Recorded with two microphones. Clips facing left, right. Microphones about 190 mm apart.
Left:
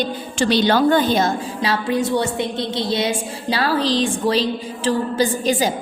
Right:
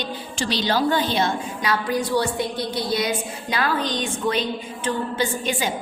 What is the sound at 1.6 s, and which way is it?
A woman's voice, 25° left (ahead or behind).